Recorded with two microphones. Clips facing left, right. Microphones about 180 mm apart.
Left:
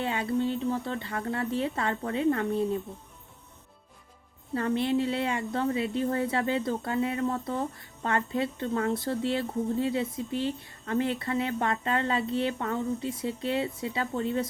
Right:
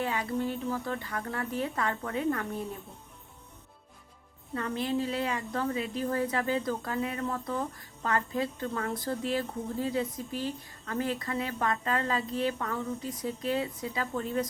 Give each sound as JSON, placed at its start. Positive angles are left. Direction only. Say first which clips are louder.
{"t": 0.0, "sound": "speech", "louder": "left 3 dB", "side_deg": 25}
{"t": 4.5, "sound": "speech", "louder": "left 4 dB", "side_deg": 30}